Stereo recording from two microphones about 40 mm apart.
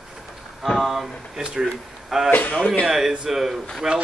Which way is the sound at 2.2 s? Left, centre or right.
Left.